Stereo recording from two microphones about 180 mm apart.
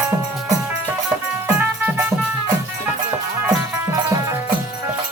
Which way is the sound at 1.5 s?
10° right (ahead or behind).